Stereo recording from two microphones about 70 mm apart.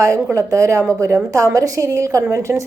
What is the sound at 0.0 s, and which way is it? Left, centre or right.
A woman's voice, right.